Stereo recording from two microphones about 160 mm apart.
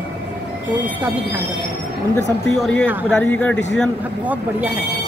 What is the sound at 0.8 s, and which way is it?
Speech, 10° right (ahead or behind).